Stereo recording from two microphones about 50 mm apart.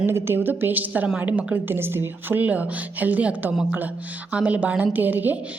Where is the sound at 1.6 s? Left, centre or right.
Right.